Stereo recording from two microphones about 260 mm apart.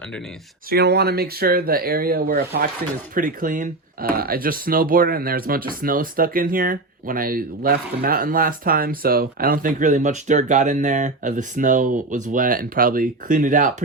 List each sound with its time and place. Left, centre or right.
0.7 s speech: right